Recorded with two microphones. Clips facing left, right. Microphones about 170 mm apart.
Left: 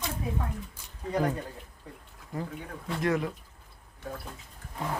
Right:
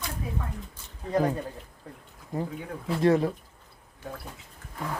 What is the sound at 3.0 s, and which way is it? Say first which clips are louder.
Speech: right 6 dB; 30° right (ahead or behind).